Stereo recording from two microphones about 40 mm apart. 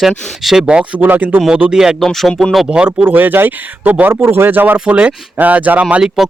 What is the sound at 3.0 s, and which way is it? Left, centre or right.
Speech, right.